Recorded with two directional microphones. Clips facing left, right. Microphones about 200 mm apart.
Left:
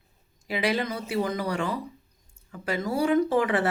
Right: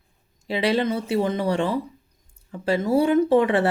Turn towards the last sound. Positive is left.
turn(degrees=-25)  # may be behind; listen again after turning